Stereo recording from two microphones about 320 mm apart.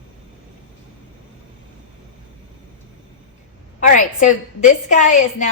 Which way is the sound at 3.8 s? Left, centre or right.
Left.